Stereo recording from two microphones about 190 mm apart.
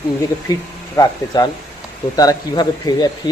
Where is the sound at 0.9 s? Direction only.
20° left (ahead or behind).